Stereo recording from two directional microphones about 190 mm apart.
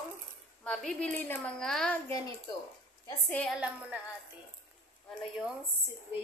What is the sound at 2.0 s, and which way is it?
Speech, 20° left (ahead or behind).